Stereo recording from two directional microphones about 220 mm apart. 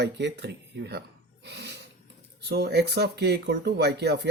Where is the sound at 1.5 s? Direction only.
50° right (ahead or behind).